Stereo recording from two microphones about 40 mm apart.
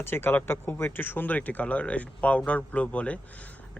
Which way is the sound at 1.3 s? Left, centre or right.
Left.